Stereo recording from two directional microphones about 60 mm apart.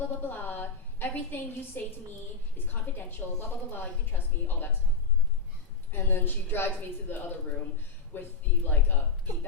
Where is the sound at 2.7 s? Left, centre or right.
Left.